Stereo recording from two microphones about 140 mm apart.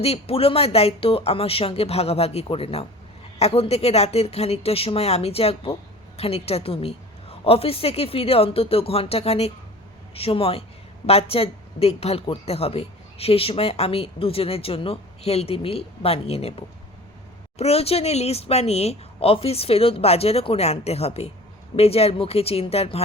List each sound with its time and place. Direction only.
0.0 s a woman's voice: 45° left (ahead or behind)